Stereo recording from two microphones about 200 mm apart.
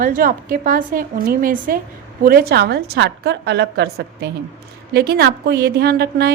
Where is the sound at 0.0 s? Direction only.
45° right (ahead or behind).